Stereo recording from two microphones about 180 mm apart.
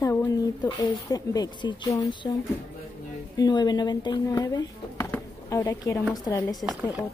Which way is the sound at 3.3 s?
20° left (ahead or behind).